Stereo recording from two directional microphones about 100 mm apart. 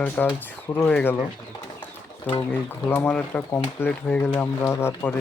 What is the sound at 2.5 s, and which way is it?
Speech, 20° left (ahead or behind).